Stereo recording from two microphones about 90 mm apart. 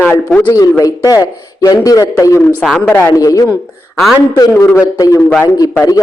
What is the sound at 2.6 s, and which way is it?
Speech, 10° left (ahead or behind).